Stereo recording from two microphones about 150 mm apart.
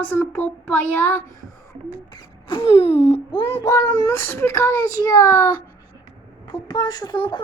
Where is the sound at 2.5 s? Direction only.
35° left (ahead or behind).